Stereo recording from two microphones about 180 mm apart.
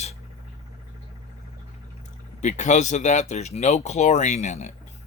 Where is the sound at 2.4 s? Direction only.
40° left (ahead or behind).